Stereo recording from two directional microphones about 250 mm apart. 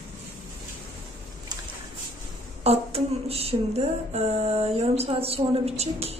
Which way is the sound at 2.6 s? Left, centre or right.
Right.